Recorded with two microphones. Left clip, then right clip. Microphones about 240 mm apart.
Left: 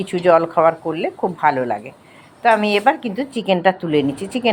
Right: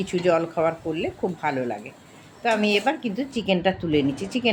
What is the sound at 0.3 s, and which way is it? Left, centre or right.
A woman's voice, centre.